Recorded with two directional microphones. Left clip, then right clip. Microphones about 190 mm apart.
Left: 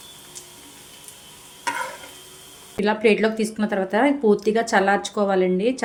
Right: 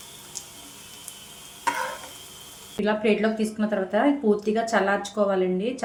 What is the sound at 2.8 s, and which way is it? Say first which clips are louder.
Speech: left 4 dB; 50° left (ahead or behind).